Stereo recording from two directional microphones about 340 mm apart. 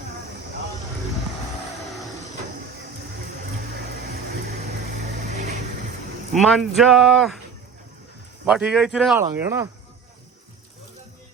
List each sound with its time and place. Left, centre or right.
6.3 s speech: centre
8.4 s speech: centre